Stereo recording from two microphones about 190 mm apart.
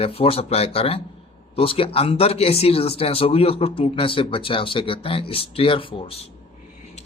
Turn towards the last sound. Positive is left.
turn(degrees=30)  # may be behind; listen again after turning